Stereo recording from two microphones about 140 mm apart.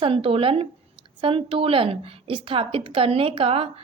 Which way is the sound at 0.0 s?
40° right (ahead or behind).